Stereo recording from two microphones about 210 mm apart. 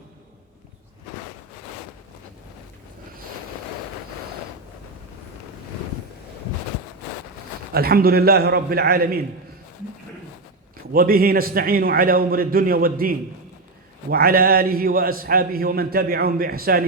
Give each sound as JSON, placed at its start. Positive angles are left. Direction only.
{"t": 7.7, "sound": "a man's voice", "side_deg": -45}
{"t": 10.9, "sound": "a man's voice", "side_deg": -45}